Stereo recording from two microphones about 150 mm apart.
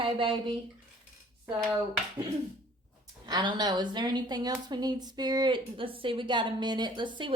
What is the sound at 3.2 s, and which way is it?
A woman's voice, 30° right (ahead or behind).